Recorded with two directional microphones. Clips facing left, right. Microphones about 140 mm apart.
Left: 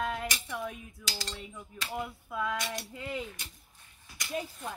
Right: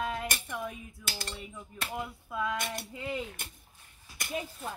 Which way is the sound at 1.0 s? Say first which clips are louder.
Even; 55° right (ahead or behind).